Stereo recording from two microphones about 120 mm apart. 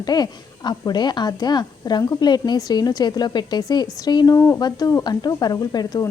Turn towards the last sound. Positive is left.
turn(degrees=30)  # may be behind; listen again after turning